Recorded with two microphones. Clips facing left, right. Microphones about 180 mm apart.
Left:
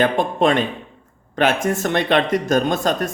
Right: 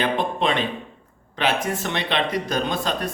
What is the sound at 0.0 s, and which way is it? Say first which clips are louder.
A man's voice: left 5 dB; 45° left (ahead or behind).